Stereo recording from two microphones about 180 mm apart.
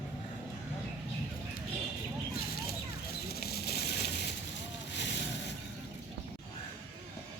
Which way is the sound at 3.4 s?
60° left (ahead or behind).